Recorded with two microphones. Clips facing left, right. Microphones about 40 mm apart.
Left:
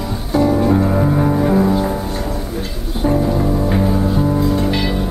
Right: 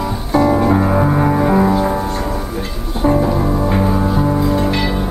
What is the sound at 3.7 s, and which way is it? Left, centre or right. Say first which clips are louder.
Music: right 1 dB; centre.